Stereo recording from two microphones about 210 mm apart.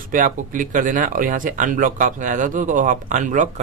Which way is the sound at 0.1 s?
40° right (ahead or behind).